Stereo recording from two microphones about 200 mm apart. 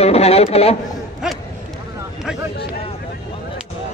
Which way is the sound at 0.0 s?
30° left (ahead or behind).